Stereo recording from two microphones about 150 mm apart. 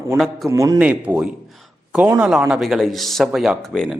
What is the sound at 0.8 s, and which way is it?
A man's voice, 10° right (ahead or behind).